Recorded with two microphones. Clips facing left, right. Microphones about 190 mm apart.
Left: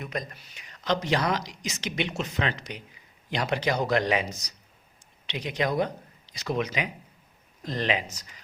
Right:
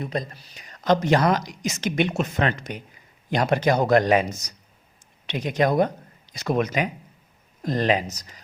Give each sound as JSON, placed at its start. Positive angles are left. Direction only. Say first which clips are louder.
{"t": 0.0, "sound": "speech", "louder": "right 5 dB", "side_deg": -30}